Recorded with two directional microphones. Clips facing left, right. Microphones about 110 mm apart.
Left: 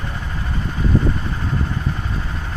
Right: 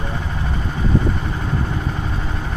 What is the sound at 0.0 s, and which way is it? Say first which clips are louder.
Vehicle: right 3 dB; 20° right (ahead or behind).